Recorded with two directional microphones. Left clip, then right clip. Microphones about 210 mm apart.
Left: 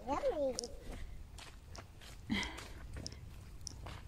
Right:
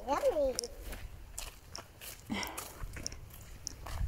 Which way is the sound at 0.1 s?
55° right (ahead or behind).